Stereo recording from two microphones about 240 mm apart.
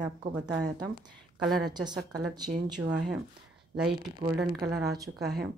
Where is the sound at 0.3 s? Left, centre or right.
Centre.